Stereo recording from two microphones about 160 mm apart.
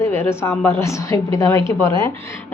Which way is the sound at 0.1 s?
15° left (ahead or behind).